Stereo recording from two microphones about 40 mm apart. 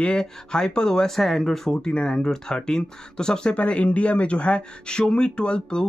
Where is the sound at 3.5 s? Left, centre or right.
Left.